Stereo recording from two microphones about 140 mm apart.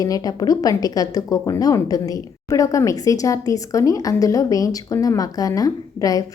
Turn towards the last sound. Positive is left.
turn(degrees=25)  # may be behind; listen again after turning